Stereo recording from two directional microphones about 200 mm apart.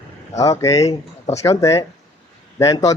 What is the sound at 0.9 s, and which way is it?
Speech, 30° left (ahead or behind).